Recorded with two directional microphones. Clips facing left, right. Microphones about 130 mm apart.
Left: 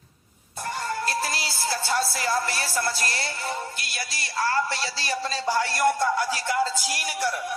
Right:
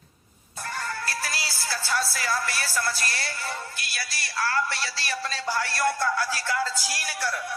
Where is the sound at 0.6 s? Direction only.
20° left (ahead or behind).